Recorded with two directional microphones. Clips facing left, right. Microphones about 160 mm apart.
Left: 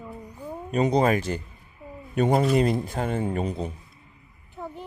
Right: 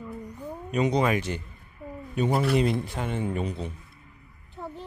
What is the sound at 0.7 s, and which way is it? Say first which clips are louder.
Speech: left 3 dB; 35° left (ahead or behind).